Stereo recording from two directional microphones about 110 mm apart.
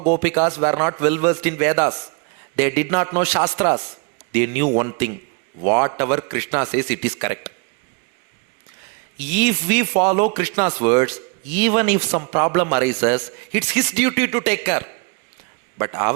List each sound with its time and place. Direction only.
0.0 s speech: 20° right (ahead or behind)
9.1 s speech: 15° right (ahead or behind)